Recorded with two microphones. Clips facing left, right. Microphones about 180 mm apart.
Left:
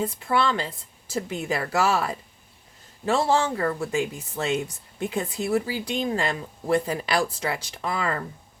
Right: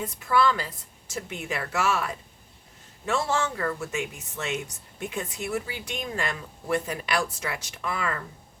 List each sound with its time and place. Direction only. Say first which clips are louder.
0.0 s speech: even; 30° left (ahead or behind)